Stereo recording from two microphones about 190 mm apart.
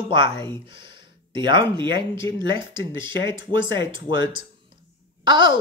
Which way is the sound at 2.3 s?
25° right (ahead or behind).